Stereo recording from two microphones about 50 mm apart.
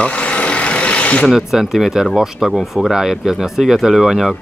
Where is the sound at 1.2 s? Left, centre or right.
Centre.